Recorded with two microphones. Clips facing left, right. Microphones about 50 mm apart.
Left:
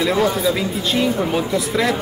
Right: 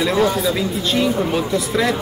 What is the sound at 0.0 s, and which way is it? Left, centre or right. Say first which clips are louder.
Speech: even; centre.